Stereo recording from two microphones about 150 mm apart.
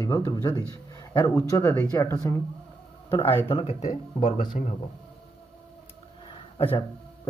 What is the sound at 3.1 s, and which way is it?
Speech, 35° left (ahead or behind).